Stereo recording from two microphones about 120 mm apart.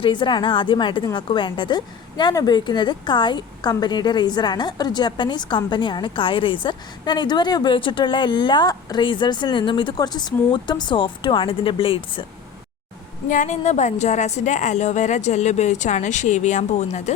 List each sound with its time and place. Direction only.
0.0 s a woman's voice: 40° left (ahead or behind)
13.2 s a woman's voice: 90° left